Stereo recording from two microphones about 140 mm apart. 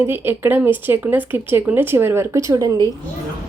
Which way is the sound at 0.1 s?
15° right (ahead or behind).